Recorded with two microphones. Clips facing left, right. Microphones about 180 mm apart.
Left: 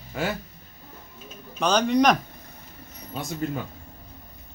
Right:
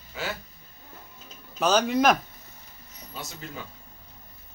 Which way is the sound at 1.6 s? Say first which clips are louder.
Left 2 dB; 5° right (ahead or behind).